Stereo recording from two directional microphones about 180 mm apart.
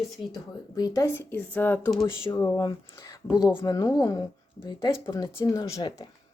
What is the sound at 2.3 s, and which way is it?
Speech, 20° left (ahead or behind).